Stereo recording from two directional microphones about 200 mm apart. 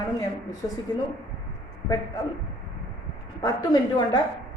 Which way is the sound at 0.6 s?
20° left (ahead or behind).